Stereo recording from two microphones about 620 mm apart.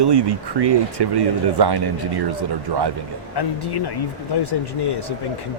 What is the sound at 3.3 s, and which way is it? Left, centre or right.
Speech, left.